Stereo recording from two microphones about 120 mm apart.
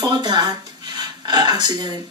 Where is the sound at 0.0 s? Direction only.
35° right (ahead or behind).